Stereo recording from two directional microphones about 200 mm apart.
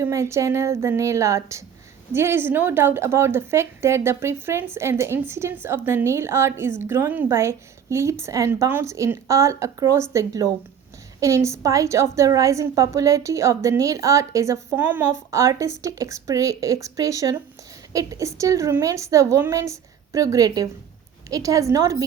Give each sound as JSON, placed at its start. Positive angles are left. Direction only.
{"t": 0.0, "sound": "a woman's voice", "side_deg": -15}